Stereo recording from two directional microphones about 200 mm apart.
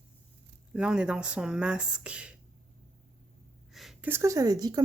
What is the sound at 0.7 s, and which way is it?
Speech, 5° right (ahead or behind).